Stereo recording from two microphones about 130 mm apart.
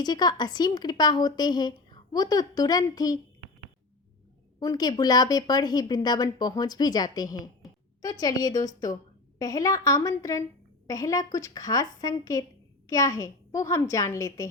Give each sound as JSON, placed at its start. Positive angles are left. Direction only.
{"t": 0.0, "sound": "speech", "side_deg": 35}
{"t": 4.6, "sound": "speech", "side_deg": 30}